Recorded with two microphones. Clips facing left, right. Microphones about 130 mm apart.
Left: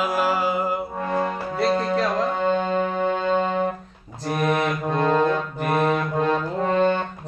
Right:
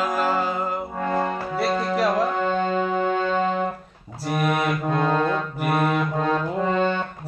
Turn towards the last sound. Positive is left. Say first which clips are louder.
# left 1 dB
turn(degrees=-5)  # may be behind; listen again after turning